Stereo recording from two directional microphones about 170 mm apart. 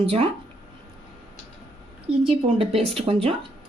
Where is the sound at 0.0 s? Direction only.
35° right (ahead or behind).